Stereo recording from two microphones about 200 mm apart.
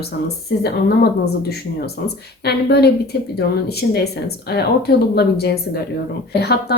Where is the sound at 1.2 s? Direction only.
55° left (ahead or behind).